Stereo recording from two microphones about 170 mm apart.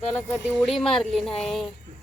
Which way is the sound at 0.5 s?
Centre (ahead or behind).